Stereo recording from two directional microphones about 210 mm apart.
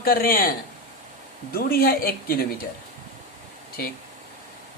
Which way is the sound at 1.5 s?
45° left (ahead or behind).